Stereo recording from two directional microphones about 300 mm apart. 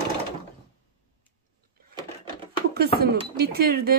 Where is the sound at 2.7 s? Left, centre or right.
Right.